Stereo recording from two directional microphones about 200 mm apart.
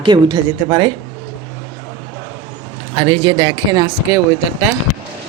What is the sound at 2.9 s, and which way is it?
Speech, 25° right (ahead or behind).